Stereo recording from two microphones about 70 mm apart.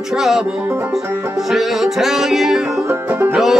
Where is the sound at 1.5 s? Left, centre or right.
Centre.